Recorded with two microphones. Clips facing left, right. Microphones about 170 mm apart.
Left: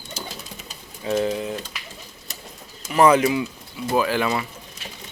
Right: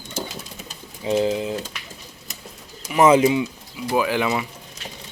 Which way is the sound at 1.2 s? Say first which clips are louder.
Right 2 dB; 20° right (ahead or behind).